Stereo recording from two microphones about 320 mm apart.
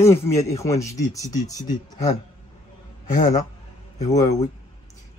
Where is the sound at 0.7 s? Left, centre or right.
Left.